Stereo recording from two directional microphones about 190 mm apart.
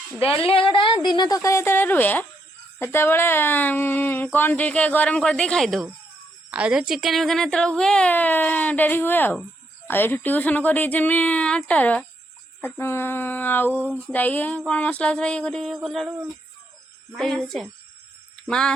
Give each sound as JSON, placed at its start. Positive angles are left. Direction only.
{"t": 0.4, "sound": "a woman's voice", "side_deg": 30}
{"t": 13.7, "sound": "a sound", "side_deg": -10}
{"t": 14.1, "sound": "a woman's voice", "side_deg": 10}
{"t": 17.2, "sound": "speech", "side_deg": 0}